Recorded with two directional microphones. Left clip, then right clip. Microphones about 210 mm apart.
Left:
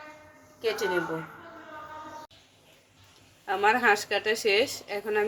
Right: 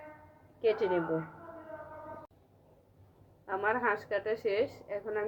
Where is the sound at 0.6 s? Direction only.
15° right (ahead or behind).